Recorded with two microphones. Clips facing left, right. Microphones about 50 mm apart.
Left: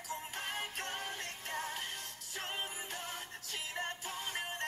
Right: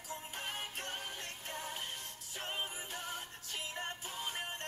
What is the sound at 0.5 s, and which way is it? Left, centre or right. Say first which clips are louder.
Music: left 2 dB; left.